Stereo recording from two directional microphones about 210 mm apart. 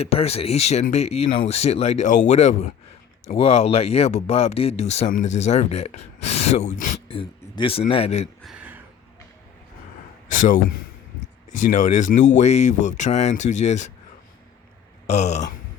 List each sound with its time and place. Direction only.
0.0 s speech: 30° left (ahead or behind)
7.2 s speech: 25° left (ahead or behind)
8.4 s a sound: 5° right (ahead or behind)
10.2 s speech: 40° left (ahead or behind)
15.0 s speech: 35° left (ahead or behind)